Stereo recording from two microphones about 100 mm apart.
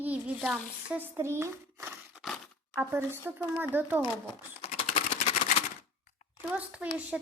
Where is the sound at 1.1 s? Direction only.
25° right (ahead or behind).